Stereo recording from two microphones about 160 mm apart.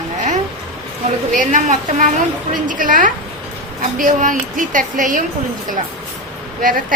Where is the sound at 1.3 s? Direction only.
50° right (ahead or behind).